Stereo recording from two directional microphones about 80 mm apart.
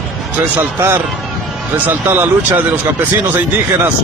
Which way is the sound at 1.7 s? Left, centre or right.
Right.